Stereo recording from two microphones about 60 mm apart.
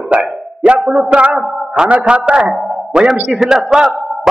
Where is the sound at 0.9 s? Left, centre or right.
Right.